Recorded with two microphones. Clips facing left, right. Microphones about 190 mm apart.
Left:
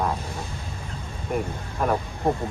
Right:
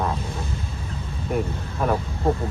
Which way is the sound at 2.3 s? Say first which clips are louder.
Right 1 dB; 15° left (ahead or behind).